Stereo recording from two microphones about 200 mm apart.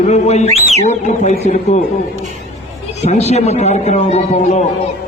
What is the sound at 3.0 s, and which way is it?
A man's voice, 35° left (ahead or behind).